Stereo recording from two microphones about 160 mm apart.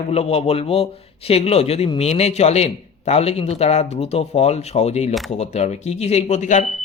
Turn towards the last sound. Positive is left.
turn(degrees=45)  # may be behind; listen again after turning